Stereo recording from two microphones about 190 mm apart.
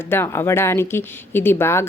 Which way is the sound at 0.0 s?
10° left (ahead or behind).